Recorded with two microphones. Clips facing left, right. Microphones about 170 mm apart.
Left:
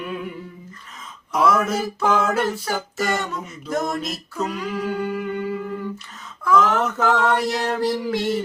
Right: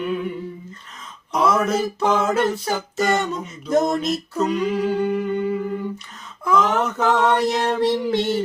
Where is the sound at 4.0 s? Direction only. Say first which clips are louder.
Right 5 dB; centre (ahead or behind).